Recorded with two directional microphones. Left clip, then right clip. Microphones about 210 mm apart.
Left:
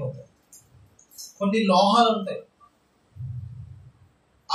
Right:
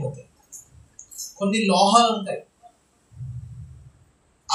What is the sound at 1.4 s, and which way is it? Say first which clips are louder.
Speech: right 1 dB; 25° right (ahead or behind).